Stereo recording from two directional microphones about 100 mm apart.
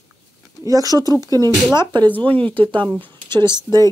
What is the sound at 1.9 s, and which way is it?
Speech, 20° left (ahead or behind).